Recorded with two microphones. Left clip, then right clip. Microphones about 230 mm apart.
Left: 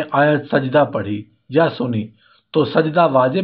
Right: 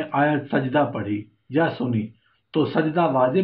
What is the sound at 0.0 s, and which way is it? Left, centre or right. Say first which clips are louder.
Speech: left 6 dB; left.